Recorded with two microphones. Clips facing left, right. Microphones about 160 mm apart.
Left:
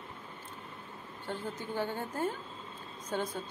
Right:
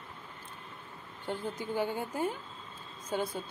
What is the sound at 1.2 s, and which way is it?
Speech, 15° right (ahead or behind).